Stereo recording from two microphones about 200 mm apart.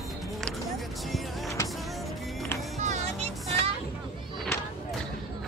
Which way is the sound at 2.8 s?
35° right (ahead or behind).